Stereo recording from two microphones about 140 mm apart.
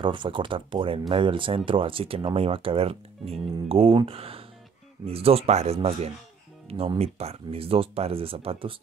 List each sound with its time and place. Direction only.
0.0 s speech: 35° right (ahead or behind)